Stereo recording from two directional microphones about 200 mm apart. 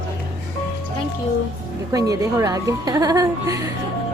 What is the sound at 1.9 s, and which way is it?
A woman's voice, 15° right (ahead or behind).